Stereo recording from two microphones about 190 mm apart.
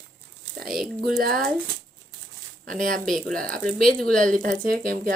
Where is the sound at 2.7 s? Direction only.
45° right (ahead or behind).